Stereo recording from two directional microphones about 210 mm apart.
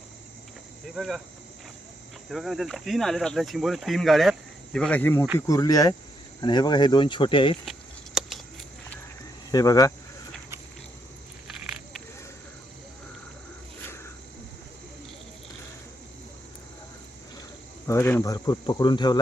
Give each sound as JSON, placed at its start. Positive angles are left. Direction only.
{"t": 0.9, "sound": "speech", "side_deg": 0}
{"t": 2.3, "sound": "speech", "side_deg": 0}
{"t": 9.5, "sound": "speech", "side_deg": 15}
{"t": 17.8, "sound": "speech", "side_deg": 10}